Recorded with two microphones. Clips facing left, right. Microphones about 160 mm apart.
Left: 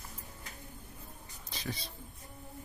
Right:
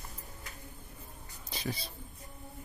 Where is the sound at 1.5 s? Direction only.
5° right (ahead or behind).